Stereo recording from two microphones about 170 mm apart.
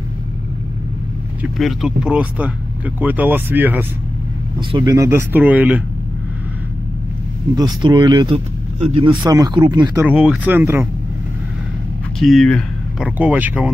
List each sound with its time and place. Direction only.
1.4 s speech: centre (ahead or behind)
4.6 s speech: 25° right (ahead or behind); by 5.8 s 10° right (ahead or behind)
7.5 s speech: 25° right (ahead or behind)
10.0 s speech: 5° right (ahead or behind)
12.2 s speech: centre (ahead or behind)
13.0 s speech: 10° right (ahead or behind)